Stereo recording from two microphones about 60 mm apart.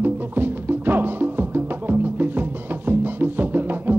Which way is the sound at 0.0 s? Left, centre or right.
Right.